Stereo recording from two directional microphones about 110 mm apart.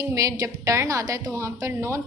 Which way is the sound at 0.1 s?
30° right (ahead or behind).